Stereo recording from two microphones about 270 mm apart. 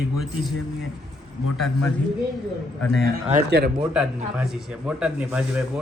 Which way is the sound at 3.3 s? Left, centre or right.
Right.